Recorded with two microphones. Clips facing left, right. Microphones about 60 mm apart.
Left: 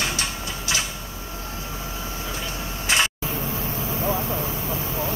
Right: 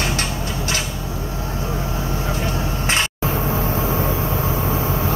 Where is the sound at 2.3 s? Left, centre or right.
Right.